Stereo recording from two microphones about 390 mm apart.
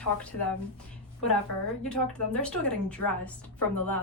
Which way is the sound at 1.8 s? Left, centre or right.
Centre.